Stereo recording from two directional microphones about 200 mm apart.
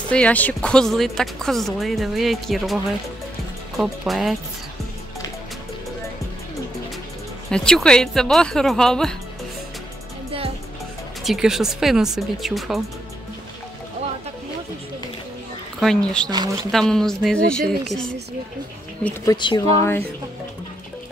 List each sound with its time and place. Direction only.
0.1 s speech: 5° left (ahead or behind)
7.5 s speech: 5° left (ahead or behind)
11.2 s speech: centre (ahead or behind)
15.8 s speech: 5° left (ahead or behind)
19.3 s speech: 20° left (ahead or behind)